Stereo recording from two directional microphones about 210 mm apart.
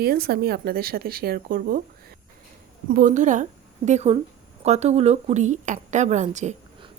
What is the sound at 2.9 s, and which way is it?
Speech, 40° right (ahead or behind).